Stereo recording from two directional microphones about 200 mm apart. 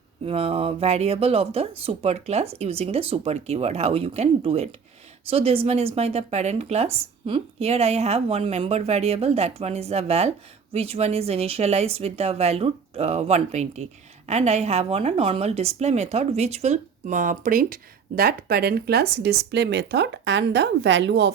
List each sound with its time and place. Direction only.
0.3 s speech: 30° right (ahead or behind); by 21.3 s 60° right (ahead or behind)